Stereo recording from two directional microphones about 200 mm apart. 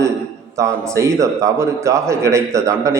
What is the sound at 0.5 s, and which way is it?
A man's voice, 15° right (ahead or behind).